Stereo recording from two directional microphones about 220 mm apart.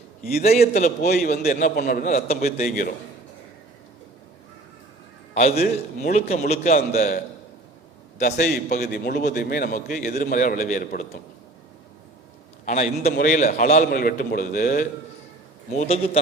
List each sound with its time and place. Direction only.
0.6 s a man's voice: 35° left (ahead or behind)
5.3 s a man's voice: 30° left (ahead or behind)
12.6 s a man's voice: 30° left (ahead or behind)
15.8 s speech: 25° left (ahead or behind)